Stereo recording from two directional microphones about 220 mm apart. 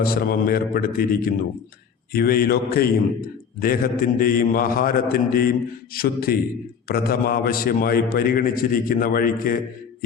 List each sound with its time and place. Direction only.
0.0 s a man's voice: 40° left (ahead or behind)